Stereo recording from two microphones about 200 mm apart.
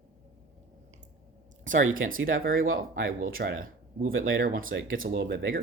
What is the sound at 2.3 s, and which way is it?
Speech, 45° right (ahead or behind).